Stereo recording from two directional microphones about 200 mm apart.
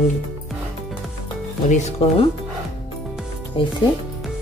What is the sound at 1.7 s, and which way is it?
Speech, 35° left (ahead or behind).